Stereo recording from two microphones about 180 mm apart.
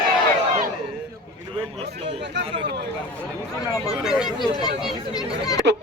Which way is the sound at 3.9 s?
5° right (ahead or behind).